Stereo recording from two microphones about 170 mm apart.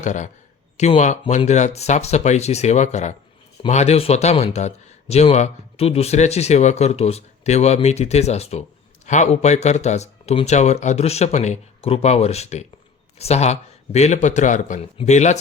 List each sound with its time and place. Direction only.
0.0 s speech: 45° left (ahead or behind)